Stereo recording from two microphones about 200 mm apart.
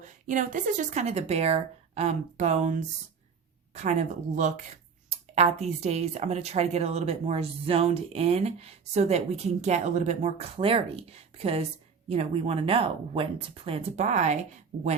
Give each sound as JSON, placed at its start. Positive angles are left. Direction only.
{"t": 0.0, "sound": "speech", "side_deg": -40}
{"t": 4.4, "sound": "speech", "side_deg": -35}